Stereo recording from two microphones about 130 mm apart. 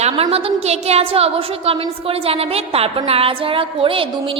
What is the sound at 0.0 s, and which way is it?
A woman's voice, 50° right (ahead or behind).